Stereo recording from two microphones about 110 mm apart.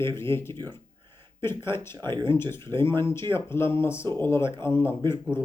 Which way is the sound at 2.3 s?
25° left (ahead or behind).